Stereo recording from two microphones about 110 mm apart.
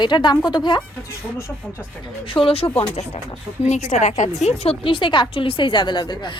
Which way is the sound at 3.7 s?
90° left.